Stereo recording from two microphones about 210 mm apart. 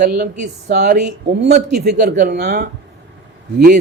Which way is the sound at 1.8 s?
50° right (ahead or behind).